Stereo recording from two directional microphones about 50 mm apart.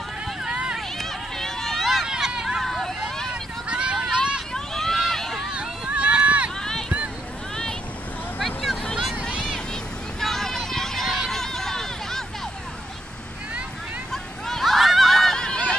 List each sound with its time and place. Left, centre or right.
0.4 s run: centre
0.7 s run: centre
2.0 s hubbub: centre
2.6 s vehicle: centre
3.6 s vehicle: right
4.0 s a sound: centre
4.6 s run: centre
5.5 s run: right
8.4 s vehicle: centre
10.2 s run: centre
14.1 s a sound: centre
15.3 s a sound: centre